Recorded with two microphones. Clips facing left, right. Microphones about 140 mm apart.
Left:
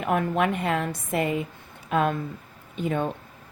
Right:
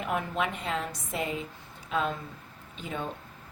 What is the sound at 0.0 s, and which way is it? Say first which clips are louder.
Speech: left 6 dB; 55° left (ahead or behind).